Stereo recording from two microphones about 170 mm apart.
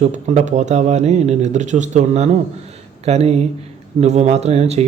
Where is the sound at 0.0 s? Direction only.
45° right (ahead or behind).